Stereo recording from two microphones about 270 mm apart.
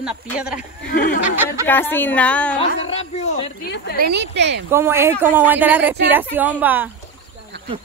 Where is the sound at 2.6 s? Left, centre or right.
Left.